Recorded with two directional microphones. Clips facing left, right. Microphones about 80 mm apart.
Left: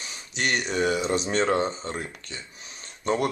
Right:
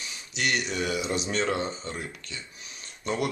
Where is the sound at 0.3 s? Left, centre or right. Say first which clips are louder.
Left 2 dB; left.